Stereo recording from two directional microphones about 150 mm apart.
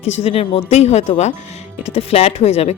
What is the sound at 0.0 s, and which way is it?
Speech, 45° left (ahead or behind).